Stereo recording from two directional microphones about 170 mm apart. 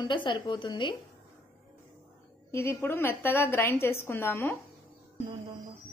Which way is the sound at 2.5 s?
15° left (ahead or behind).